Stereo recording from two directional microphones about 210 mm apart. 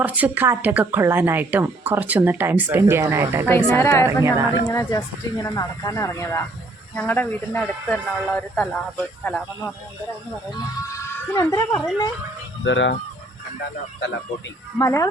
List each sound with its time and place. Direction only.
0.0 s speech: 5° right (ahead or behind)
3.4 s speech: 10° left (ahead or behind)
4.2 s speech: 15° right (ahead or behind)
4.7 s speech: 15° left (ahead or behind)
12.6 s speech: 60° left (ahead or behind)
14.8 s speech: 15° left (ahead or behind)